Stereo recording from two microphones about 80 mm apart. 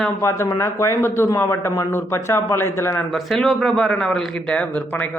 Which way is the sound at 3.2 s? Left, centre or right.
Centre.